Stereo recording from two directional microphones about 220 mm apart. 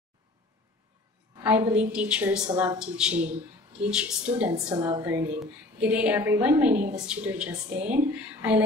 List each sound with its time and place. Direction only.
1.3 s a woman's voice: 10° right (ahead or behind)
2.5 s a woman's voice: 20° right (ahead or behind)
2.8 s speech: 5° right (ahead or behind)
4.6 s a woman's voice: 20° right (ahead or behind)